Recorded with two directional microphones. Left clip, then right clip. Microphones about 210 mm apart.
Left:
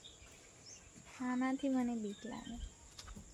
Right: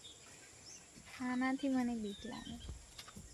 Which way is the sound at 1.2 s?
Centre (ahead or behind).